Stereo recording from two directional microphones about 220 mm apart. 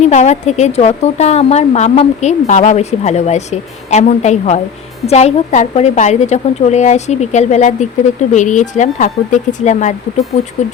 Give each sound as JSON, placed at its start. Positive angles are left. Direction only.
{"t": 0.0, "sound": "speech", "side_deg": 30}